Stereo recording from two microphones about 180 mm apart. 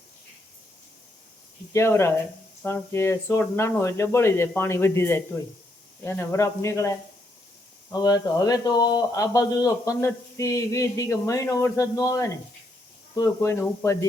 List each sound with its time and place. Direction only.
1.7 s speech: 15° left (ahead or behind)
7.9 s speech: 20° left (ahead or behind)